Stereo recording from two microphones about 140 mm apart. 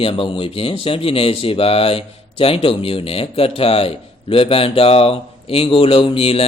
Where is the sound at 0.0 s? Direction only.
40° left (ahead or behind).